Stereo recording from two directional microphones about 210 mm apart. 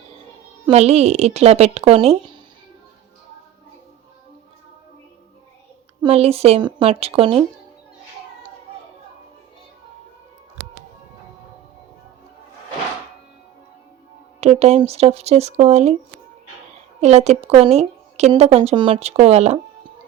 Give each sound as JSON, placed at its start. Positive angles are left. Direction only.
{"t": 0.7, "sound": "a woman's voice", "side_deg": -30}
{"t": 6.0, "sound": "a woman's voice", "side_deg": -30}
{"t": 14.4, "sound": "a woman's voice", "side_deg": -30}
{"t": 17.0, "sound": "a woman's voice", "side_deg": -30}